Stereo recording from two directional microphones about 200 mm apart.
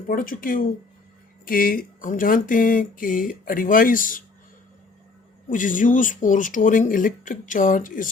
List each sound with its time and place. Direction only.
0.1 s speech: 45° left (ahead or behind)
5.5 s speech: 40° left (ahead or behind)